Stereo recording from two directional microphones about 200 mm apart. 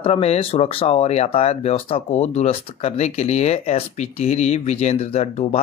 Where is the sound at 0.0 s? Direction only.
30° left (ahead or behind).